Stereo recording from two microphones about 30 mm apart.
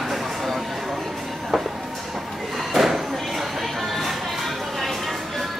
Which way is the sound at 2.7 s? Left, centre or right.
Centre.